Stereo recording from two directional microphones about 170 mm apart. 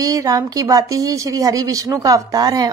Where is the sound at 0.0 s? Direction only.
20° right (ahead or behind).